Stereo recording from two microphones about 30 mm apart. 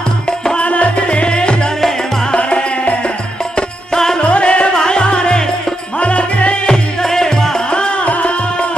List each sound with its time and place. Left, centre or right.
0.6 s music: left
1.0 s music: left
3.9 s music: centre
4.2 s music: left
4.7 s music: left
5.9 s music: left
7.0 s music: centre
7.7 s music: left